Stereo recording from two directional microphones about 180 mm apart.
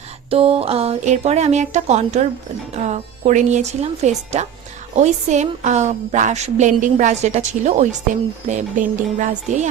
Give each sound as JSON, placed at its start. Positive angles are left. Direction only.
{"t": 0.3, "sound": "a woman's voice", "side_deg": -30}